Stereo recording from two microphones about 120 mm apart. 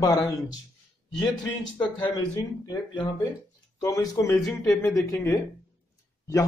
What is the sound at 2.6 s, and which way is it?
Speech, 40° left (ahead or behind).